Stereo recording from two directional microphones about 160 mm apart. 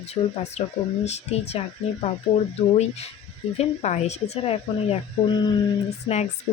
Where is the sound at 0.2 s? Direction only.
35° left (ahead or behind).